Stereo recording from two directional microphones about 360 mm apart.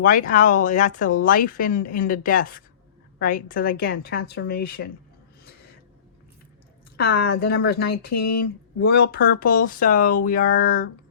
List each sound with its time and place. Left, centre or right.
0.0 s speech: left
6.9 s speech: left